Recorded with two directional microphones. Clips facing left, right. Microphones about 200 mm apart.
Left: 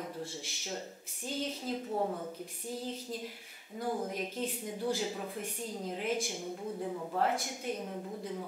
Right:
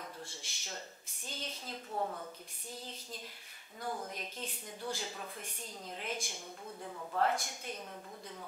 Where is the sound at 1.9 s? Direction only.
20° left (ahead or behind).